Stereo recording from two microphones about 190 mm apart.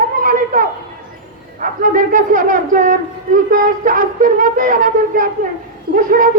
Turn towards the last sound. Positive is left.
turn(degrees=-45)  # may be behind; listen again after turning